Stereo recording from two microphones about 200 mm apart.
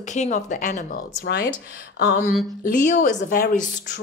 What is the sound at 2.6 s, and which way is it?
A woman's voice, 40° left (ahead or behind).